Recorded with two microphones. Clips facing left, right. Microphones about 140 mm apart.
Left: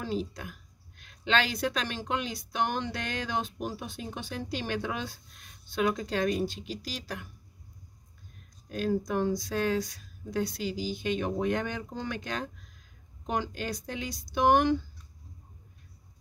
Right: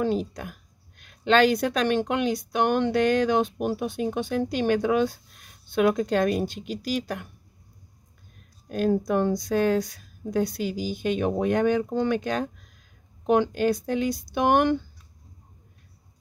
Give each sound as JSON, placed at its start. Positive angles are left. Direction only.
{"t": 0.0, "sound": "speech", "side_deg": -55}
{"t": 8.6, "sound": "speech", "side_deg": -50}